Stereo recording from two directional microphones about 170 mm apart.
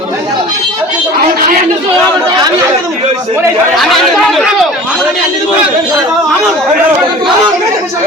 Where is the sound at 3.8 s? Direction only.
Centre (ahead or behind).